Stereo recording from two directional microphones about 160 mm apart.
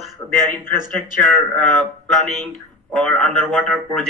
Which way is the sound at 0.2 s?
15° left (ahead or behind).